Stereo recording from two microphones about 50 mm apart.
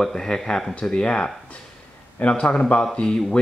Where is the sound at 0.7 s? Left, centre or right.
Centre.